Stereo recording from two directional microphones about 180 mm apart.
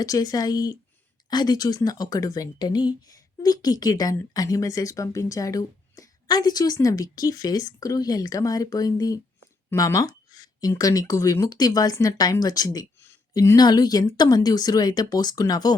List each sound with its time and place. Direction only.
0.0 s speech: 20° left (ahead or behind)